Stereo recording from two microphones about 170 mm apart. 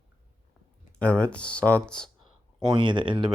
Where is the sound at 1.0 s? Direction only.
5° left (ahead or behind).